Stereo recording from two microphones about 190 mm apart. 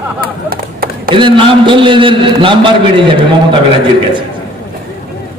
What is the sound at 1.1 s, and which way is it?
A man's voice, 25° right (ahead or behind).